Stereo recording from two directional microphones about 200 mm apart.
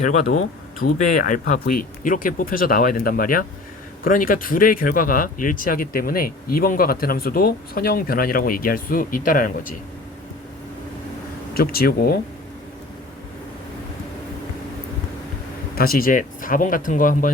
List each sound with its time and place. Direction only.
0.0 s speech: 40° left (ahead or behind)
11.5 s speech: 50° left (ahead or behind)
15.7 s speech: 45° left (ahead or behind)